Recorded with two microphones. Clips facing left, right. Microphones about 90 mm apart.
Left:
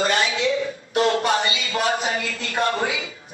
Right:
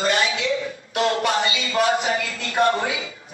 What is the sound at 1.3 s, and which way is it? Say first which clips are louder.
Speech: even; 30° right (ahead or behind).